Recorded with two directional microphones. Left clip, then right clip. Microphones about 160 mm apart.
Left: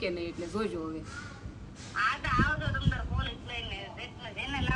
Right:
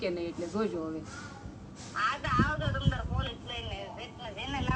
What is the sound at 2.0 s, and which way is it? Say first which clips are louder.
Vehicle: left 1 dB; 15° right (ahead or behind).